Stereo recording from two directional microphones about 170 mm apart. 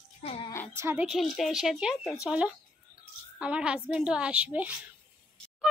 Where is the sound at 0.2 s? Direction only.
35° left (ahead or behind).